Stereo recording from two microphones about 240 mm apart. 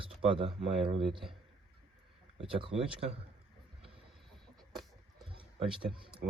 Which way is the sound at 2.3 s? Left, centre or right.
Right.